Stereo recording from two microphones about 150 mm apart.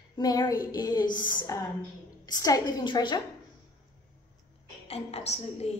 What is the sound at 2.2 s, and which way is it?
Speech, 25° left (ahead or behind).